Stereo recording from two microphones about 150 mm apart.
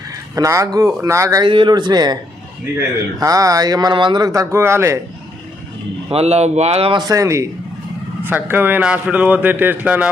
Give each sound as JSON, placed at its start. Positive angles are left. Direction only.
{"t": 0.3, "sound": "speech", "side_deg": -20}
{"t": 1.5, "sound": "speech", "side_deg": -30}
{"t": 3.2, "sound": "speech", "side_deg": -25}
{"t": 6.1, "sound": "speech", "side_deg": -45}
{"t": 7.0, "sound": "a man's voice", "side_deg": -20}